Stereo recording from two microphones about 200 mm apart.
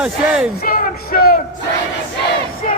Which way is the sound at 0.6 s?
45° left (ahead or behind).